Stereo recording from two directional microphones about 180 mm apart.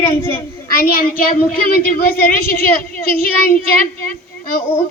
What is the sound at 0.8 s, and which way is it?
A woman's voice, 55° left (ahead or behind).